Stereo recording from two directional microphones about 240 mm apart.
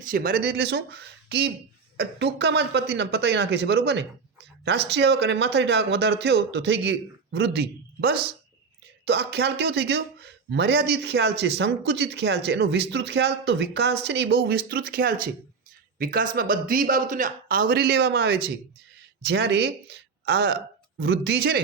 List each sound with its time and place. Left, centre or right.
0.1 s speech: right